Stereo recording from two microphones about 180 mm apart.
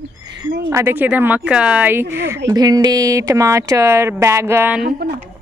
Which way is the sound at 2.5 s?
20° right (ahead or behind).